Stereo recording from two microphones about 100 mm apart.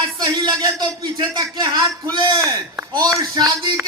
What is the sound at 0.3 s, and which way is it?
A man's voice, 40° right (ahead or behind).